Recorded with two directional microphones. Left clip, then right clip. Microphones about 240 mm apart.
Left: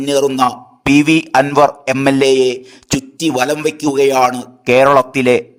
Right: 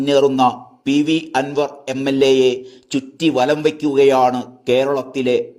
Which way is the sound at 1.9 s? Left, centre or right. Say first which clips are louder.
Left 3 dB; left.